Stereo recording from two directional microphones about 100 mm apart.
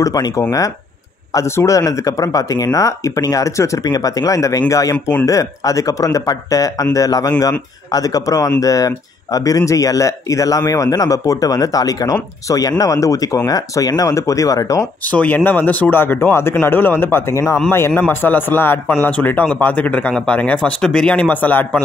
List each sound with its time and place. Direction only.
0.0 s speech: 35° left (ahead or behind)
15.0 s speech: 15° left (ahead or behind)